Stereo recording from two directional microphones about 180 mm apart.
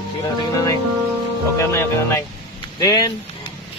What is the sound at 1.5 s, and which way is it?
Speech, 15° left (ahead or behind).